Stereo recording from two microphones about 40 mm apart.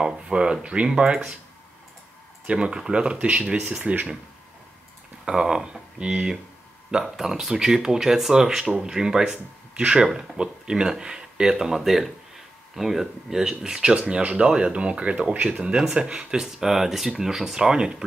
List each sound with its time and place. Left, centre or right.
0.0 s speech: right
2.4 s speech: right
5.2 s speech: centre
13.9 s speech: right